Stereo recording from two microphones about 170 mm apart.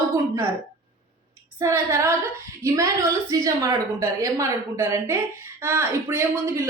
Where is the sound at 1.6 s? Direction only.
15° right (ahead or behind).